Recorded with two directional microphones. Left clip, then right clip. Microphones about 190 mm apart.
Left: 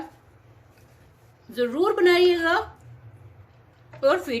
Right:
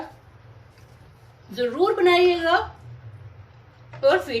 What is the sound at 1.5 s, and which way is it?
Speech, 55° left (ahead or behind).